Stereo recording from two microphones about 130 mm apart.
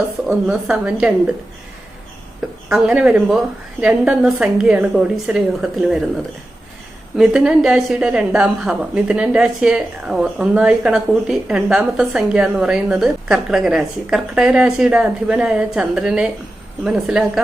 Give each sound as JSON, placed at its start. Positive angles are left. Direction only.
{"t": 0.3, "sound": "a woman's voice", "side_deg": -5}
{"t": 2.6, "sound": "a woman's voice", "side_deg": -5}
{"t": 7.2, "sound": "a woman's voice", "side_deg": -5}